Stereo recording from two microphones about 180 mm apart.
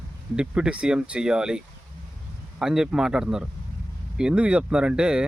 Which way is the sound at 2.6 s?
5° right (ahead or behind).